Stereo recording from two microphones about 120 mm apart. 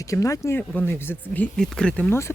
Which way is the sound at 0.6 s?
15° left (ahead or behind).